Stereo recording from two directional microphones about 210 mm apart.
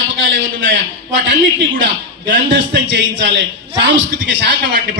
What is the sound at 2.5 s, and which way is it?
A man's voice, 55° right (ahead or behind).